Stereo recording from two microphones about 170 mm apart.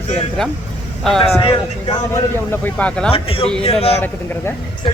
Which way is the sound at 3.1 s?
35° left (ahead or behind).